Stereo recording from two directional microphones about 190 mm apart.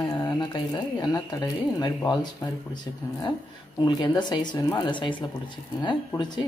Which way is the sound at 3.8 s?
25° left (ahead or behind).